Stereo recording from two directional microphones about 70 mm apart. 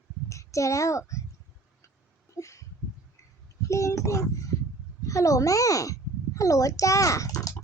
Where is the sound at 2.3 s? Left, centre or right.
Left.